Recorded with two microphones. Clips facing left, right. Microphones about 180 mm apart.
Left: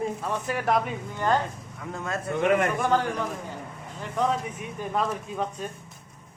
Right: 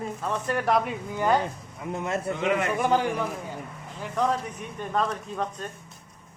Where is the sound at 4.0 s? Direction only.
Centre (ahead or behind).